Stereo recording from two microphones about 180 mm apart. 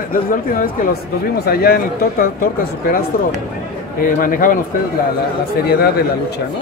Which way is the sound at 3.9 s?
50° left (ahead or behind).